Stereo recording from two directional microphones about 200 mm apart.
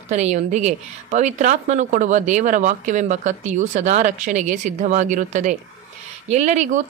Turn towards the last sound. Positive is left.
turn(degrees=-35)  # may be behind; listen again after turning